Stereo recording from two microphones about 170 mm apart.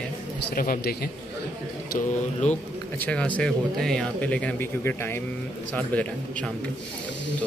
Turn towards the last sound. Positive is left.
turn(degrees=5)  # may be behind; listen again after turning